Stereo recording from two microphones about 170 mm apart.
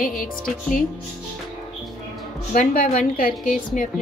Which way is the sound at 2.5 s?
50° left (ahead or behind).